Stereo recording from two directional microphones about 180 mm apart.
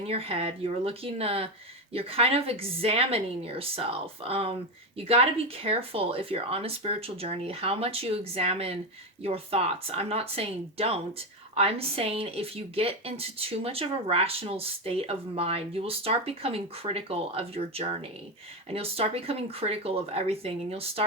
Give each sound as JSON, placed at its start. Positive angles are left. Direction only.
{"t": 0.1, "sound": "speech", "side_deg": -30}